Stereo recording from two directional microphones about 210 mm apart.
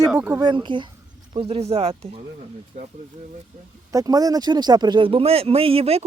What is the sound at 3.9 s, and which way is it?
Speech, 15° right (ahead or behind).